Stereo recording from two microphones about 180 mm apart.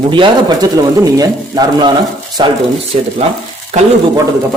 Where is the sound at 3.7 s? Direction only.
40° right (ahead or behind).